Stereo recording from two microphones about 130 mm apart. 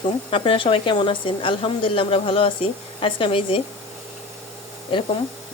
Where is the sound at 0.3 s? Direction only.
45° left (ahead or behind).